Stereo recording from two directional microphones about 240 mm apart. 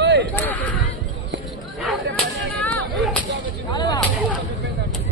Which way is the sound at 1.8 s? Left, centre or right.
Centre.